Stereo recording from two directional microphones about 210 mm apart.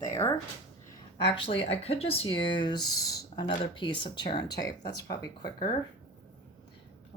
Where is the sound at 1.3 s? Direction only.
25° left (ahead or behind).